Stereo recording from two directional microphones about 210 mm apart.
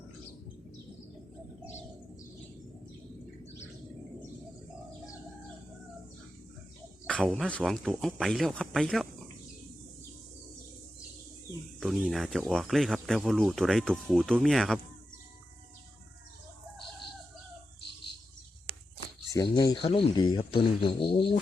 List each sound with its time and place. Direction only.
7.0 s speech: 5° left (ahead or behind)
11.8 s speech: centre (ahead or behind)
19.3 s speech: 20° left (ahead or behind)